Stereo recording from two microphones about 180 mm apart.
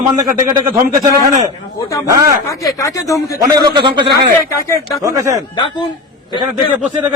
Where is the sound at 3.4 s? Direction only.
20° right (ahead or behind).